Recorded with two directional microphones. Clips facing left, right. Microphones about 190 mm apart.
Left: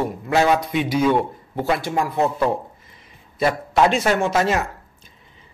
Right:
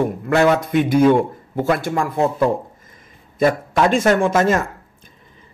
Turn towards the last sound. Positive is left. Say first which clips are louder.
# right 3 dB
turn(degrees=-50)  # may be behind; listen again after turning